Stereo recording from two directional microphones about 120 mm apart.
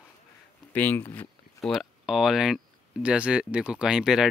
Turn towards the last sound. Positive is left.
turn(degrees=-5)  # may be behind; listen again after turning